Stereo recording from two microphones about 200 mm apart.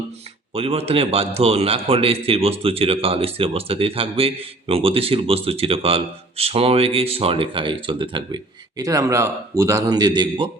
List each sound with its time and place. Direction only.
0.5 s a man's voice: 30° right (ahead or behind)